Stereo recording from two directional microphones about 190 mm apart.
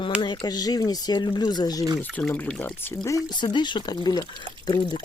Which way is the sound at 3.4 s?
25° left (ahead or behind).